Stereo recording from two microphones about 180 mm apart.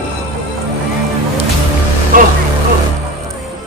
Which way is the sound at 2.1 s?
50° right (ahead or behind).